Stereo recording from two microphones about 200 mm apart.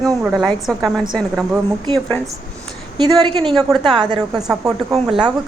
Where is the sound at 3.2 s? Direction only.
25° right (ahead or behind).